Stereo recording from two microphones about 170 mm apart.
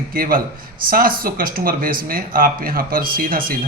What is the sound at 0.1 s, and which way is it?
Speech, 60° right (ahead or behind).